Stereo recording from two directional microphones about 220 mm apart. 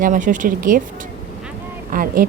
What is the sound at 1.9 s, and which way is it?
Speech, 40° right (ahead or behind).